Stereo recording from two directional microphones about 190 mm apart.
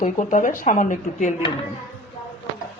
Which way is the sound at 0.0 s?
40° left (ahead or behind).